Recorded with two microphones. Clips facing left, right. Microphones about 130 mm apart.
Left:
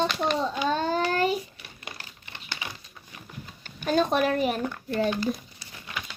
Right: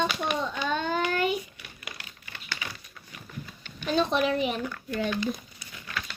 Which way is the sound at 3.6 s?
45° left (ahead or behind).